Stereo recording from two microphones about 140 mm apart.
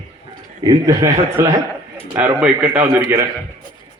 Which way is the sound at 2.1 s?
10° right (ahead or behind).